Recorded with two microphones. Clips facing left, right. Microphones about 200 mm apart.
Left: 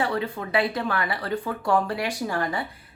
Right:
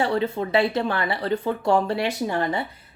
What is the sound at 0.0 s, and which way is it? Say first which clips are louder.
Speech: right 4 dB; 25° right (ahead or behind).